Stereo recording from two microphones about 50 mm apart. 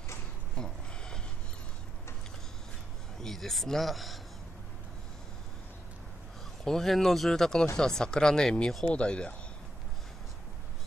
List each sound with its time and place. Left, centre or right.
0.6 s a sound: centre
3.2 s speech: centre
6.6 s speech: centre